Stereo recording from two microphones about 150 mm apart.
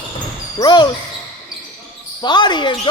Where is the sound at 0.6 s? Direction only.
30° left (ahead or behind).